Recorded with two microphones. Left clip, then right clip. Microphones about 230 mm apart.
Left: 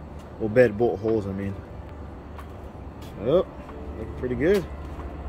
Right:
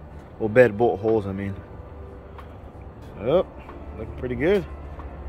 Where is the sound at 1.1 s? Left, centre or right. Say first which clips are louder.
Right 3 dB; centre.